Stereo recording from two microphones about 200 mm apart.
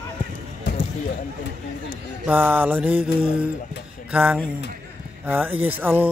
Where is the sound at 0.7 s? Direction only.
55° left (ahead or behind).